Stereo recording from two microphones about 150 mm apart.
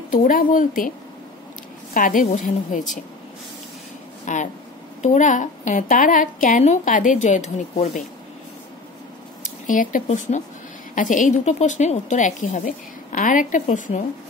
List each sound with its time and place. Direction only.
0.1 s a woman's voice: 65° left (ahead or behind)
2.0 s a woman's voice: 65° left (ahead or behind)
4.3 s a woman's voice: 55° left (ahead or behind)
9.4 s a woman's voice: 60° left (ahead or behind)